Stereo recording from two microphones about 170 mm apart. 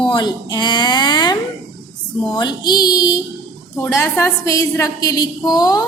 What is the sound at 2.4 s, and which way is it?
A woman's voice, 25° left (ahead or behind).